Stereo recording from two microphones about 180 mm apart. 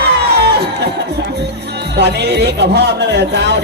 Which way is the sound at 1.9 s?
70° right (ahead or behind).